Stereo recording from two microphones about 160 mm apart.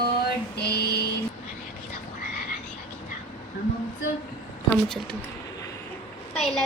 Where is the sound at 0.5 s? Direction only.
90° left.